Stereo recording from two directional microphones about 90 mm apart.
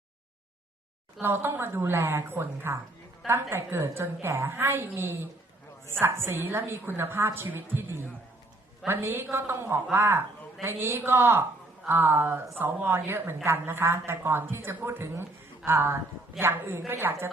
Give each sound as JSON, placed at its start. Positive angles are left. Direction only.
{"t": 1.2, "sound": "a woman's voice", "side_deg": -25}